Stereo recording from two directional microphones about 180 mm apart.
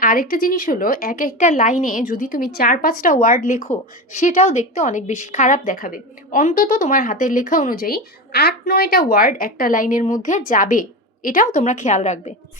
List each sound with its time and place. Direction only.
0.0 s a woman's voice: 50° left (ahead or behind)